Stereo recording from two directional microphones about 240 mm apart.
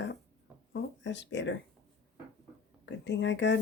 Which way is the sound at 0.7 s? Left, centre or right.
Left.